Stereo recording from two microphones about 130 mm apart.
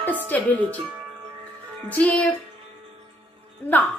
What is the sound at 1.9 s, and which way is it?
Speech, 10° left (ahead or behind).